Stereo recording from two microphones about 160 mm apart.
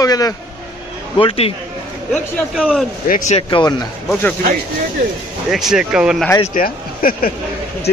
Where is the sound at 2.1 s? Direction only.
5° right (ahead or behind).